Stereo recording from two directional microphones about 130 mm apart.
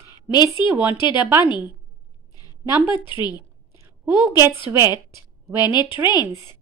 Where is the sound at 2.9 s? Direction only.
35° left (ahead or behind).